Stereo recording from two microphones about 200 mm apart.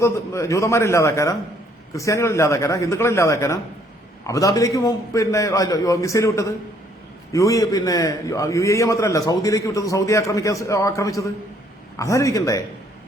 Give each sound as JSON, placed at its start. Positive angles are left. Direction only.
{"t": 0.0, "sound": "a man's voice", "side_deg": 15}